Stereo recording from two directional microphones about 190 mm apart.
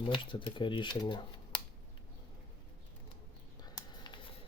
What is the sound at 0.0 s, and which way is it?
Speech, 25° left (ahead or behind).